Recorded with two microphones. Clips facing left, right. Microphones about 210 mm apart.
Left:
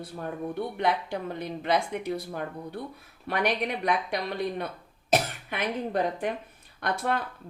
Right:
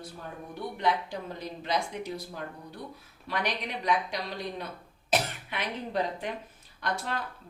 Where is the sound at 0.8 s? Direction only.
60° left (ahead or behind).